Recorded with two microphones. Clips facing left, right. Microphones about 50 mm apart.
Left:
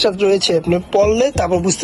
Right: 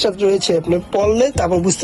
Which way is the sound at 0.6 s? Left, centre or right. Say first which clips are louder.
Left 1 dB; left.